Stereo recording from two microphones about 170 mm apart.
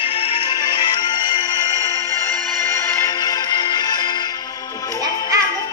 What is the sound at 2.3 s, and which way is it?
Music, 15° left (ahead or behind).